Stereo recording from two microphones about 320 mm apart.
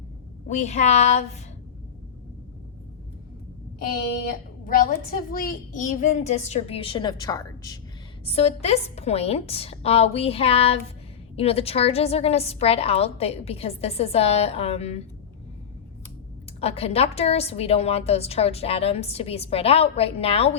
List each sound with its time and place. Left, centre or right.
0.4 s a woman's voice: left
4.6 s a woman's voice: left
16.6 s a woman's voice: centre